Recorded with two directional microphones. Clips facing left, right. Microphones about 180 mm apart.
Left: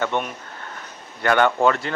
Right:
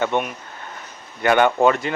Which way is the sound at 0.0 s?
15° right (ahead or behind).